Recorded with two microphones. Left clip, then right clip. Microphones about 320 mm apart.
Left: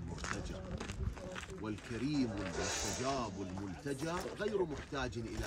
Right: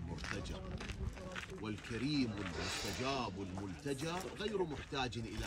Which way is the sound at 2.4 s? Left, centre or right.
Left.